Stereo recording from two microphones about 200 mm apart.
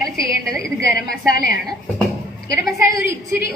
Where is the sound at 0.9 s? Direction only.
50° left (ahead or behind).